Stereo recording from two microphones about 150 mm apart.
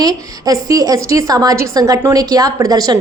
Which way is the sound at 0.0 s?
25° right (ahead or behind).